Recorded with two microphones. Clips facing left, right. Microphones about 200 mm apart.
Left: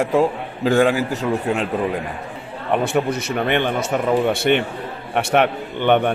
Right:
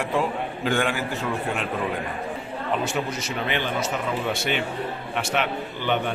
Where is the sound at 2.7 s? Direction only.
55° left (ahead or behind).